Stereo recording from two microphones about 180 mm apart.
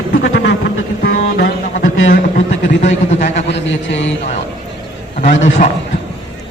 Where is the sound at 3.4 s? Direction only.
75° left (ahead or behind).